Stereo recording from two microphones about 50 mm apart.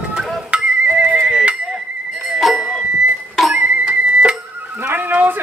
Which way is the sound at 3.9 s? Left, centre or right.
Right.